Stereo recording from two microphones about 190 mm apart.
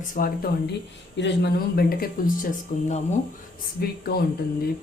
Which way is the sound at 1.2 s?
60° left (ahead or behind).